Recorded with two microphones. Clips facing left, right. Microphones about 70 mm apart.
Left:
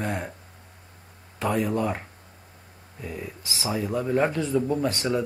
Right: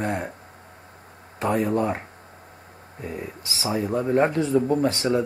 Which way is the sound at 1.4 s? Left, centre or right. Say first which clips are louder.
Right 2 dB; right.